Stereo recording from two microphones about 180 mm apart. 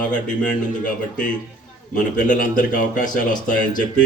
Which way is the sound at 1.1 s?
5° left (ahead or behind).